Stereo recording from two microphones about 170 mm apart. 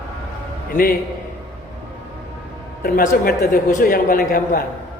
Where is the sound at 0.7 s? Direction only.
60° left (ahead or behind).